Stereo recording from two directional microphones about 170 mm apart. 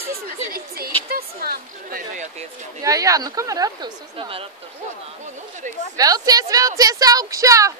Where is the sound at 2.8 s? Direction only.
20° right (ahead or behind).